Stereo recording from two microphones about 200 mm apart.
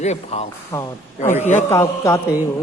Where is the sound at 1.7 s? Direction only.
15° left (ahead or behind).